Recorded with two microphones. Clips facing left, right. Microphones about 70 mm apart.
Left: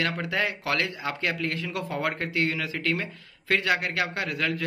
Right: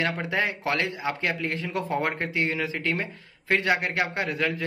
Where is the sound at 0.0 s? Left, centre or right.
Right.